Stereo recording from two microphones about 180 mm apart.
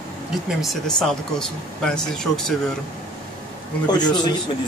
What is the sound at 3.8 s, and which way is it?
Speech, 25° left (ahead or behind).